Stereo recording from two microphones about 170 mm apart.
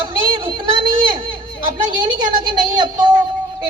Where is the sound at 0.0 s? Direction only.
30° right (ahead or behind).